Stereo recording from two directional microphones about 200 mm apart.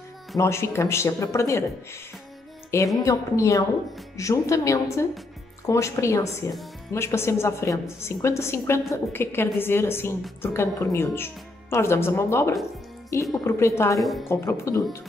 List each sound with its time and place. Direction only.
0.4 s a woman's voice: 15° left (ahead or behind)
3.0 s a woman's voice: 15° left (ahead or behind)
13.9 s a woman's voice: centre (ahead or behind)
14.3 s a woman's voice: 15° left (ahead or behind)